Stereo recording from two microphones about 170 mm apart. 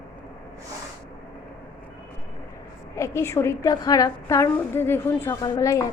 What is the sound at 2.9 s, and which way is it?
A woman's voice, 15° left (ahead or behind).